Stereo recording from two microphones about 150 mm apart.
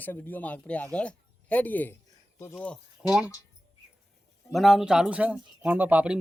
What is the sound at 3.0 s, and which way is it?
Speech, 5° right (ahead or behind).